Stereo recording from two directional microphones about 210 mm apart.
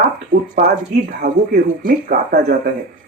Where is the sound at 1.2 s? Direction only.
30° right (ahead or behind).